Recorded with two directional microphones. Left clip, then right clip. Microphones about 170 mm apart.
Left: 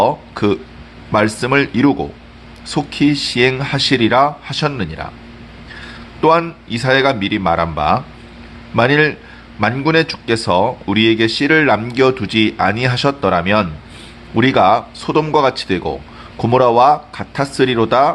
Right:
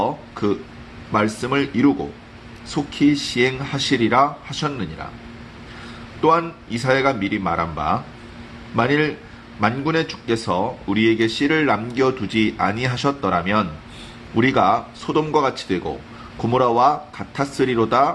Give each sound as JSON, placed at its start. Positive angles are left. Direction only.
{"t": 0.0, "sound": "a man's voice", "side_deg": 35}
{"t": 6.2, "sound": "a man's voice", "side_deg": 35}